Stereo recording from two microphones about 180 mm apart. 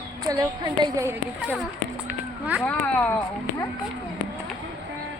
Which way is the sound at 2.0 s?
5° right (ahead or behind).